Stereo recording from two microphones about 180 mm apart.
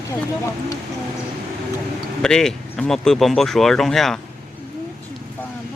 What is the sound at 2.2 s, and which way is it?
Speech, 5° left (ahead or behind).